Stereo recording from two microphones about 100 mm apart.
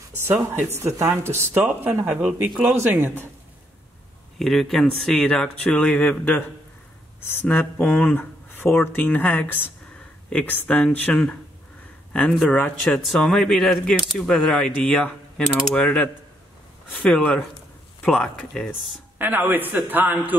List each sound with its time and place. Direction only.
0.2 s a man's voice: 25° right (ahead or behind); by 2.7 s 10° right (ahead or behind)
2.8 s a man's voice: 20° right (ahead or behind)
4.4 s speech: 5° left (ahead or behind)
13.0 s speech: centre (ahead or behind)
19.1 s a man's voice: 20° right (ahead or behind)